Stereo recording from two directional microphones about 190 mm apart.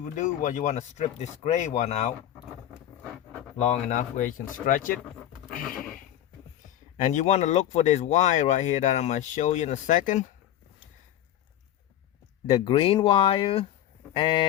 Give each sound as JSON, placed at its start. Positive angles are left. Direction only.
{"t": 0.2, "sound": "speech", "side_deg": 40}
{"t": 3.6, "sound": "speech", "side_deg": 35}
{"t": 5.8, "sound": "horse", "side_deg": 45}
{"t": 6.9, "sound": "speech", "side_deg": 40}
{"t": 12.5, "sound": "speech", "side_deg": 30}